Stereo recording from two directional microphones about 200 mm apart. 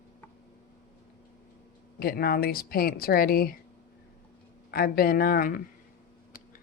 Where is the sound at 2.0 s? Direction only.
50° left (ahead or behind).